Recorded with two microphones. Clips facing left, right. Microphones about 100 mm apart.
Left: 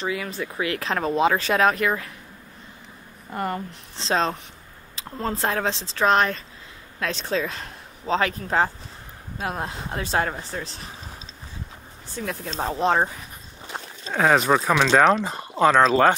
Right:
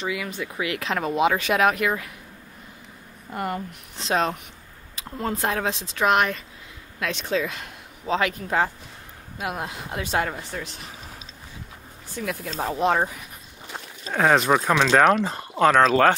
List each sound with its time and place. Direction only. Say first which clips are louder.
0.0 s speech: left 1 dB; 35° left (ahead or behind)
3.3 s speech: left 1 dB; 35° left (ahead or behind)
12.1 s speech: even; 35° left (ahead or behind)
13.7 s a sound: left 1 dB; 30° left (ahead or behind)
14.1 s speech: even; centre (ahead or behind)
15.6 s speech: even; 35° left (ahead or behind)
15.9 s speech: even; 20° left (ahead or behind)